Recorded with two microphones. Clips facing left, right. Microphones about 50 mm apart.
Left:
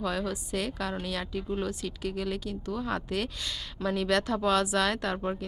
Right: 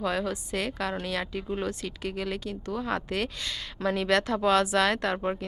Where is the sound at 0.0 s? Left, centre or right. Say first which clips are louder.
Right 2 dB; centre.